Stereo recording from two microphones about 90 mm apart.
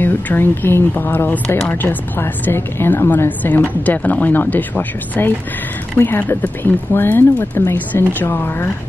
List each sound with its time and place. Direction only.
0.0 s a woman's voice: 20° left (ahead or behind)